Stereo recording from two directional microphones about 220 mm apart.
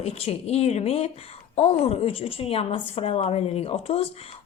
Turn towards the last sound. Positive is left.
turn(degrees=25)  # may be behind; listen again after turning